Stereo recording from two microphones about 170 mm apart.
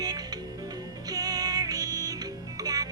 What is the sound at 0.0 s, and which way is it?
Music, 20° right (ahead or behind).